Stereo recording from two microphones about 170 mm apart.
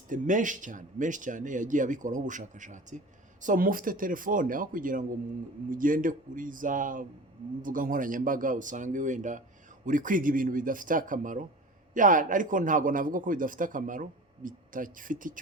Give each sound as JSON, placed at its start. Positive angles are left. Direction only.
{"t": 0.1, "sound": "a man's voice", "side_deg": -50}